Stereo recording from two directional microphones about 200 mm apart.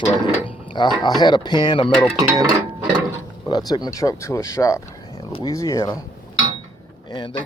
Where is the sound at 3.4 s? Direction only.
20° left (ahead or behind).